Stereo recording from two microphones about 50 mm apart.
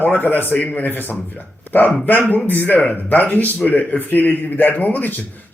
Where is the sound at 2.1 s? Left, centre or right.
Left.